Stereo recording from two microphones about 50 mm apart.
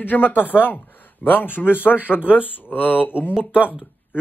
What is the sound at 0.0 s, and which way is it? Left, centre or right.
Speech, left.